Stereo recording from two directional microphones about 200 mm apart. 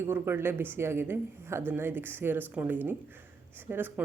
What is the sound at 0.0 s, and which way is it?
Speech, 10° right (ahead or behind).